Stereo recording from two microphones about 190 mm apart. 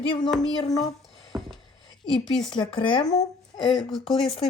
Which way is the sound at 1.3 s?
20° right (ahead or behind).